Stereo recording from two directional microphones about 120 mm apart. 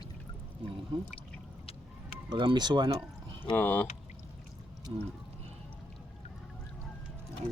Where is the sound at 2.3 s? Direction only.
40° right (ahead or behind).